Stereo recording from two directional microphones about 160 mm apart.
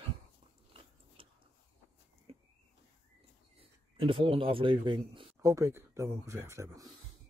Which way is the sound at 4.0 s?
35° right (ahead or behind).